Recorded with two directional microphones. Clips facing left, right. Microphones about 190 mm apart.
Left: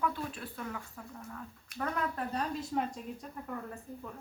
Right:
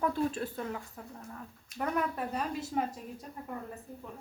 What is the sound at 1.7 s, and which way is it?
Speech, 65° left (ahead or behind).